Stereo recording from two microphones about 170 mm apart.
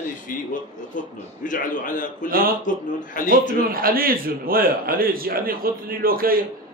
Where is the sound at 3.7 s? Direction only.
60° right (ahead or behind).